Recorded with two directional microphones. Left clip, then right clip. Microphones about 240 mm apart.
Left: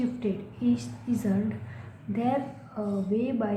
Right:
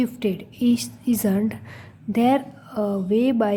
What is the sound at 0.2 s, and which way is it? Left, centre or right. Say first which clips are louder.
A woman's voice: right 7 dB; right.